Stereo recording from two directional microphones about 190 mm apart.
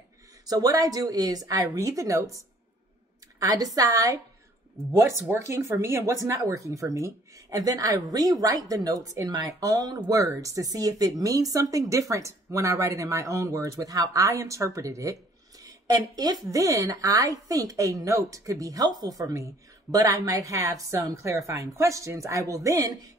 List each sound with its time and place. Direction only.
0.5 s speech: 20° right (ahead or behind)
3.3 s speech: 20° right (ahead or behind)
5.3 s speech: 15° right (ahead or behind)